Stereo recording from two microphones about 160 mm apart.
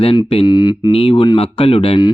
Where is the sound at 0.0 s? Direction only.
35° left (ahead or behind).